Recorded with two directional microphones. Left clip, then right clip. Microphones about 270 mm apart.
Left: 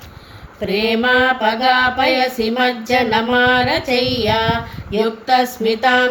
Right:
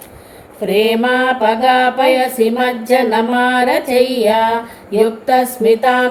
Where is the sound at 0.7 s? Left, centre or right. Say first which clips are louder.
Right 2 dB; centre.